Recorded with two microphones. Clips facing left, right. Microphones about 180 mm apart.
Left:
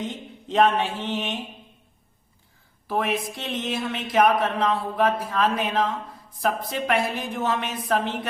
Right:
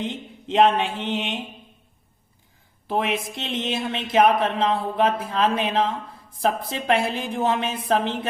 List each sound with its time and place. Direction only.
0.0 s speech: 25° right (ahead or behind)
2.8 s speech: 20° right (ahead or behind)